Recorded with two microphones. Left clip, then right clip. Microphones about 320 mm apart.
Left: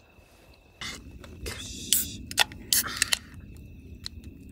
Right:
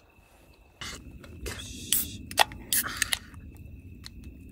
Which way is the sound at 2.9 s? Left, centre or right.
Centre.